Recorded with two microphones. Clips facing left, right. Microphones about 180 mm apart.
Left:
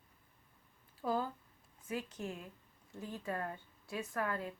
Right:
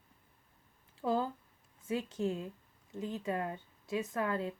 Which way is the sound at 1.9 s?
25° right (ahead or behind).